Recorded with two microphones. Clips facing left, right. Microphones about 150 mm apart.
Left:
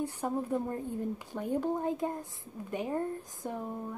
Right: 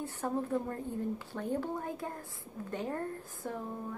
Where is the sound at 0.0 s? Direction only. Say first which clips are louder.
Left 2 dB; 15° left (ahead or behind).